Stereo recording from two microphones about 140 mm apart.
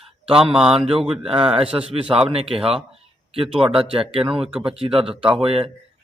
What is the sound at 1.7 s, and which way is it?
A man's voice, 40° right (ahead or behind).